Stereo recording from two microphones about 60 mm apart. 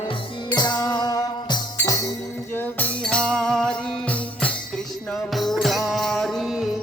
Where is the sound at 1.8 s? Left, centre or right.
Left.